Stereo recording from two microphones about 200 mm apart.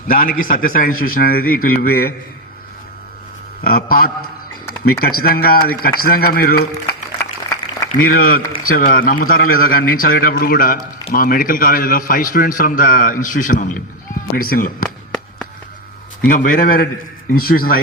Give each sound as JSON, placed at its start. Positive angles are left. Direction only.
{"t": 0.1, "sound": "a man's voice", "side_deg": 45}
{"t": 3.6, "sound": "a man's voice", "side_deg": 50}
{"t": 7.9, "sound": "a man's voice", "side_deg": 45}
{"t": 14.8, "sound": "a sound", "side_deg": 5}
{"t": 16.3, "sound": "a man's voice", "side_deg": 40}